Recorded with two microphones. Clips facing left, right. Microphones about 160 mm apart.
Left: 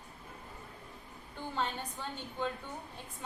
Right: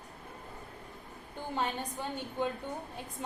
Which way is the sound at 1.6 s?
15° right (ahead or behind).